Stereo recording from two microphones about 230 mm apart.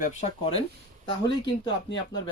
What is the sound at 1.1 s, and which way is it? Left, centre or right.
Speech, left.